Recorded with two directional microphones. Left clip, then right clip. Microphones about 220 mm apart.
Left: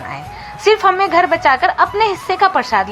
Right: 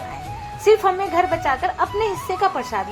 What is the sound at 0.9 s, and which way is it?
A woman's voice, 15° left (ahead or behind).